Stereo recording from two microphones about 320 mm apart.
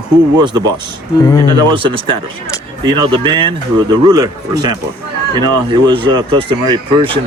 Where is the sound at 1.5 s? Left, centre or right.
Centre.